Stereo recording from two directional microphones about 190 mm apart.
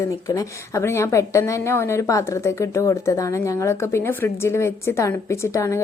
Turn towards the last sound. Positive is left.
turn(degrees=15)  # may be behind; listen again after turning